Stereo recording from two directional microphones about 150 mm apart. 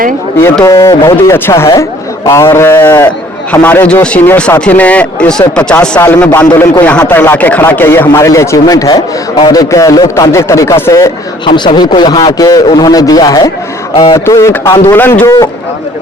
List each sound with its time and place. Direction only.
0.6 s a man's voice: 20° left (ahead or behind)
11.4 s a man's voice: 30° left (ahead or behind)
13.9 s speech: 40° left (ahead or behind)
14.3 s a man's voice: 20° left (ahead or behind)